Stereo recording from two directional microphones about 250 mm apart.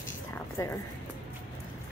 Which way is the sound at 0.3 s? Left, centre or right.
Centre.